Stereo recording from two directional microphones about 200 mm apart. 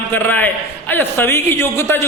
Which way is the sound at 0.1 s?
10° left (ahead or behind).